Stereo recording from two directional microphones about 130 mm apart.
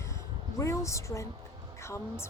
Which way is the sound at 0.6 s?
20° left (ahead or behind).